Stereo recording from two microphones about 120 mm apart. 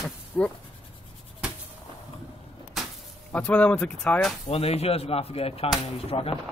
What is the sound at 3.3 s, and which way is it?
Speech, 10° left (ahead or behind).